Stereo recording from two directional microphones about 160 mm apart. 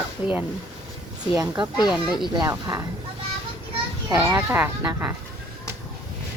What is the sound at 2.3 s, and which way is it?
Speech, 25° right (ahead or behind).